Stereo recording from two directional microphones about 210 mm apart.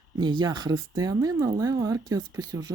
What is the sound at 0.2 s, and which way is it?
Speech, 20° right (ahead or behind).